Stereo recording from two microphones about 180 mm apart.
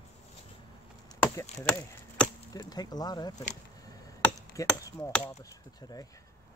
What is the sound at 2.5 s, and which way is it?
Speech, 20° left (ahead or behind).